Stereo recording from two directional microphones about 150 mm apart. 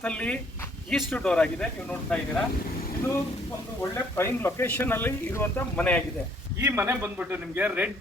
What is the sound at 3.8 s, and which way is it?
Speech, 15° left (ahead or behind).